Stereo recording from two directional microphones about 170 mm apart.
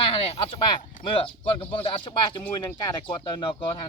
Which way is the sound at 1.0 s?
30° left (ahead or behind).